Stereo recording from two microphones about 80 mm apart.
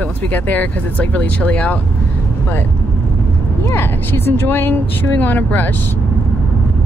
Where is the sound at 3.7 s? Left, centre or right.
Left.